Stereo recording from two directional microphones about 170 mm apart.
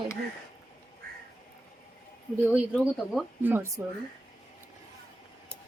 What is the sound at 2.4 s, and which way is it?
Speech, centre (ahead or behind).